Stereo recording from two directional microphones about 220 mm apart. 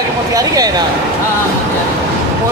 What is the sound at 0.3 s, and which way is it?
Speech, 15° right (ahead or behind).